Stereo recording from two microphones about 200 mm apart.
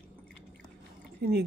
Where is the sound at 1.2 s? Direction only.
55° right (ahead or behind).